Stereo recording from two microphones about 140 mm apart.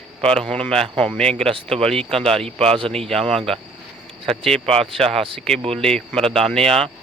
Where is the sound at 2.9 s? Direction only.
5° left (ahead or behind).